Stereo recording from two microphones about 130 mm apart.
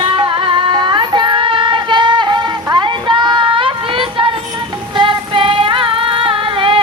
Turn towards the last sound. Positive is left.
turn(degrees=-40)  # may be behind; listen again after turning